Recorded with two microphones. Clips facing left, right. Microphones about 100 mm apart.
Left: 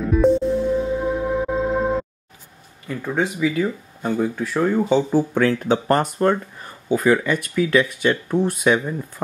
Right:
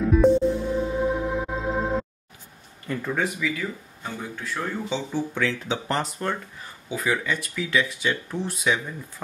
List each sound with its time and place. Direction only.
0.0 s music: centre (ahead or behind)
2.9 s speech: 15° left (ahead or behind)
3.3 s speech: 30° left (ahead or behind)
4.0 s speech: 50° left (ahead or behind)